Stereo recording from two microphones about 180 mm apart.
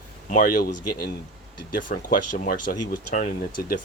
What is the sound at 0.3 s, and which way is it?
Speech, 50° left (ahead or behind).